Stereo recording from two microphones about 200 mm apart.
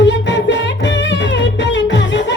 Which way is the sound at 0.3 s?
65° left (ahead or behind).